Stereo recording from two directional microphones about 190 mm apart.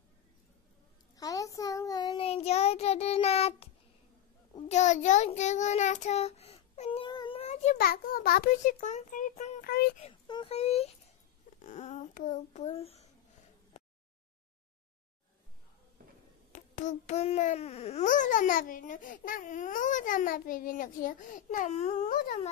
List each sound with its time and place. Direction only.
1.1 s child singing: 20° left (ahead or behind)
4.6 s child singing: 40° left (ahead or behind)
7.7 s a child's voice: 50° left (ahead or behind)
9.7 s a sound: 50° left (ahead or behind)
10.2 s a child's voice: 25° left (ahead or behind)
16.5 s a child's voice: 40° left (ahead or behind)